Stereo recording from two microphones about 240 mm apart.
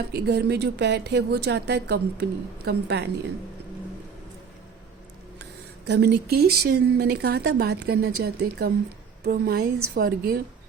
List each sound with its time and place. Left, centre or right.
0.1 s a woman's voice: right
5.8 s speech: right